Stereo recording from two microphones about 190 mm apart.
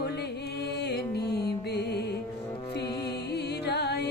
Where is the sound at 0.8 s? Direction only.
60° left (ahead or behind).